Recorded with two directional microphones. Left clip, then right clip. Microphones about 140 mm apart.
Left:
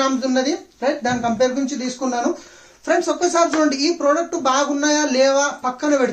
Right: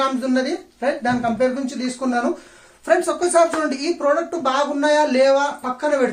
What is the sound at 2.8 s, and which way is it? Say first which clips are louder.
Speech: even; 25° left (ahead or behind).